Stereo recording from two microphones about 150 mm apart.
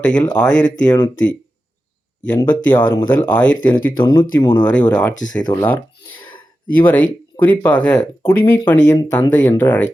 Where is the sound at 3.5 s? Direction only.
70° left (ahead or behind).